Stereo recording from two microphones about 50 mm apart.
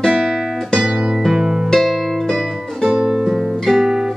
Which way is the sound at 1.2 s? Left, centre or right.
Centre.